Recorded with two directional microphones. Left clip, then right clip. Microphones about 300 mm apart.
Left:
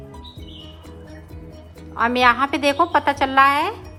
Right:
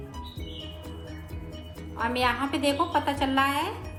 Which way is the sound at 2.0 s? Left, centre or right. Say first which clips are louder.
Left 10 dB; left.